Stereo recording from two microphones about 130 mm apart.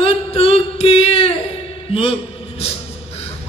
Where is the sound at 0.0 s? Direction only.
50° left (ahead or behind).